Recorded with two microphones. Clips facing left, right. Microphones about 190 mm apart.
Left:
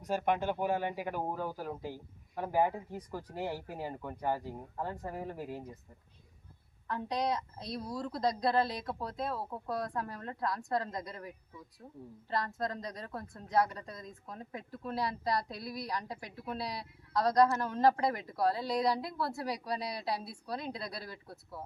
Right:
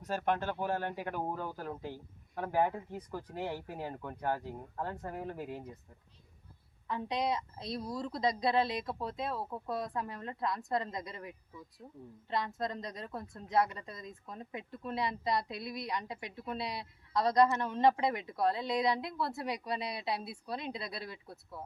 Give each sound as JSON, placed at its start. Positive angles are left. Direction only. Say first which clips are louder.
{"t": 0.0, "sound": "speech", "louder": "left 2 dB", "side_deg": 10}
{"t": 6.8, "sound": "a woman's voice", "louder": "even", "side_deg": 0}